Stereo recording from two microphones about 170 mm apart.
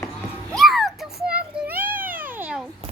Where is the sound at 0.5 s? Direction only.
Centre (ahead or behind).